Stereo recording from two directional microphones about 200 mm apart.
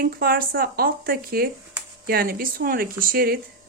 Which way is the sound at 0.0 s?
50° right (ahead or behind).